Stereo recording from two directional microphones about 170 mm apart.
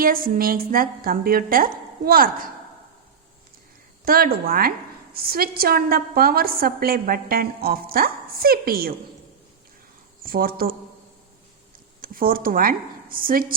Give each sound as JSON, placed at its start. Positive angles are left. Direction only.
{"t": 0.0, "sound": "a woman's voice", "side_deg": -55}
{"t": 4.0, "sound": "a woman's voice", "side_deg": -60}
{"t": 10.2, "sound": "a woman's voice", "side_deg": -60}
{"t": 12.0, "sound": "a woman's voice", "side_deg": -55}